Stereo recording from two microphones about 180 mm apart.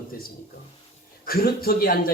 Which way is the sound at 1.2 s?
55° left (ahead or behind).